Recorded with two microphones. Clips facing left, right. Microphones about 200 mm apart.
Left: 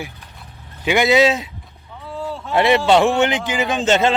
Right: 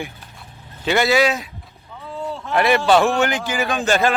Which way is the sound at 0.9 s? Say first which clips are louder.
Left 2 dB; 15° left (ahead or behind).